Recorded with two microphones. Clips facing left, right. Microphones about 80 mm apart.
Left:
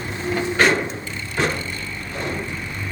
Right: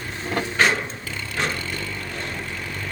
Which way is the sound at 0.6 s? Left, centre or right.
Centre.